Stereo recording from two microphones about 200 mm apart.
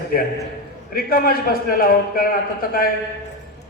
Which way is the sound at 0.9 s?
45° left (ahead or behind).